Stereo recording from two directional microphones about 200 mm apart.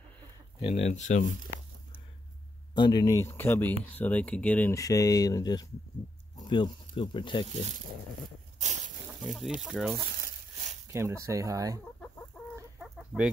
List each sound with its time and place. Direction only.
0.6 s speech: 30° left (ahead or behind)
2.7 s speech: 20° left (ahead or behind)
8.5 s snake: 35° right (ahead or behind)
9.2 s speech: centre (ahead or behind)
10.9 s speech: 15° right (ahead or behind)
12.4 s chicken: 5° left (ahead or behind)
12.8 s chicken: 5° right (ahead or behind)